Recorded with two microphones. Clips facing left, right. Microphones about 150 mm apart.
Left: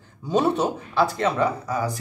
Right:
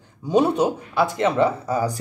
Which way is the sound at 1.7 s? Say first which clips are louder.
Right 3 dB; 35° right (ahead or behind).